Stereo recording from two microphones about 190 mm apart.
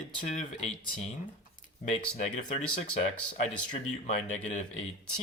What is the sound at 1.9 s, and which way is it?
Speech, 35° left (ahead or behind).